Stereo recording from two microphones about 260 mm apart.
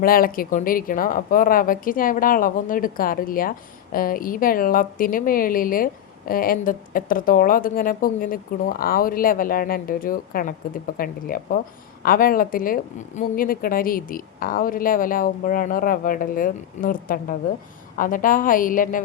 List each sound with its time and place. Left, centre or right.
0.0 s a woman's voice: left